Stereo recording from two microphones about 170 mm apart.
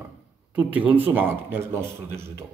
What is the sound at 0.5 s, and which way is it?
Speech, 10° right (ahead or behind).